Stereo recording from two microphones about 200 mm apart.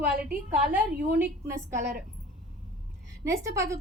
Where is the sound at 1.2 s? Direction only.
10° right (ahead or behind).